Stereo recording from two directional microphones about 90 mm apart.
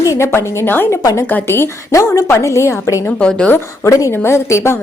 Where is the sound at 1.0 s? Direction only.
40° left (ahead or behind).